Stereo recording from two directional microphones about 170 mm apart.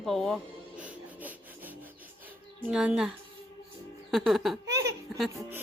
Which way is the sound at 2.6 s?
5° right (ahead or behind).